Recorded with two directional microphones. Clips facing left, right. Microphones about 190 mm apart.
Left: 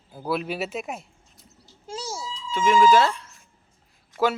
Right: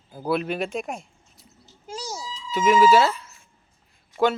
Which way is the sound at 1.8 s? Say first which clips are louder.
Left 1 dB; 25° left (ahead or behind).